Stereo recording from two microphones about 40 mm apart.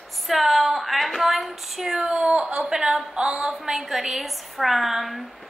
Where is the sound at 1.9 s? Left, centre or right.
Centre.